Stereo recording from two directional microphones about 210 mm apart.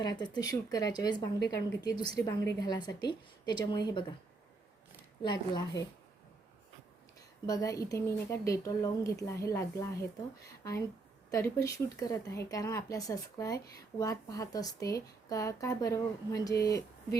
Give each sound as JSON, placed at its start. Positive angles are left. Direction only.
{"t": 0.0, "sound": "a woman's voice", "side_deg": 20}
{"t": 5.2, "sound": "a woman's voice", "side_deg": 20}
{"t": 7.4, "sound": "speech", "side_deg": 15}